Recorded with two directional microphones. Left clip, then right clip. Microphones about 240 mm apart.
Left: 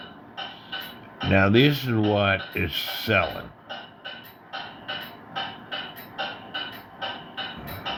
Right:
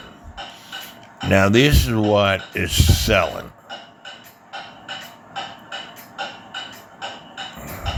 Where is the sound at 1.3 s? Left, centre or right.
Right.